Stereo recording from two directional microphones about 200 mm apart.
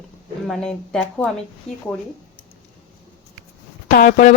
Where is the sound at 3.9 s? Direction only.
40° left (ahead or behind).